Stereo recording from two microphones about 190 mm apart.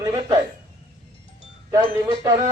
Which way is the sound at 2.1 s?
20° right (ahead or behind).